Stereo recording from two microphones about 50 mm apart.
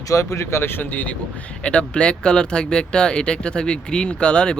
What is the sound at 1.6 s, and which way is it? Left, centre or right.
Speech, left.